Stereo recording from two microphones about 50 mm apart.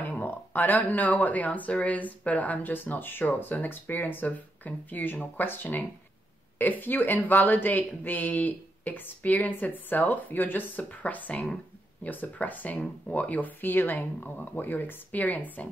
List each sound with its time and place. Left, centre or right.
0.0 s speech: left